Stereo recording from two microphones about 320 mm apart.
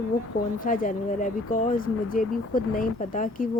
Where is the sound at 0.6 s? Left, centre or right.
Left.